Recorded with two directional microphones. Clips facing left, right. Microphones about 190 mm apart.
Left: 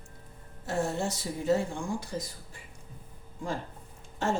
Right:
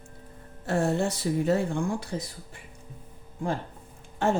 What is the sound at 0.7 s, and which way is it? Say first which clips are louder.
Speech: right 5 dB; 60° right (ahead or behind).